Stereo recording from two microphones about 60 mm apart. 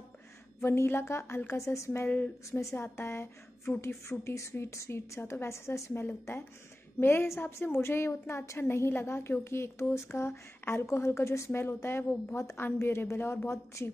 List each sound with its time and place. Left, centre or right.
0.6 s a woman's voice: left
2.0 s a woman's voice: left
2.7 s a woman's voice: left
11.6 s a woman's voice: left
12.4 s a woman's voice: left